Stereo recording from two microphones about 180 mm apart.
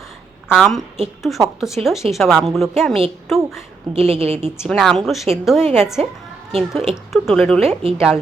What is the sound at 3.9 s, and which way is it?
Speech, 35° right (ahead or behind).